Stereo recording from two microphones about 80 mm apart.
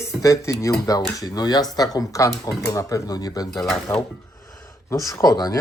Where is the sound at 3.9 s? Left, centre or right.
Left.